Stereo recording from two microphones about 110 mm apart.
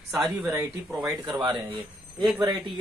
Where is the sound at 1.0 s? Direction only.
40° right (ahead or behind).